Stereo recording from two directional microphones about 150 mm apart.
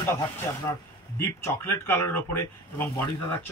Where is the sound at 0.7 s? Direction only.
15° left (ahead or behind).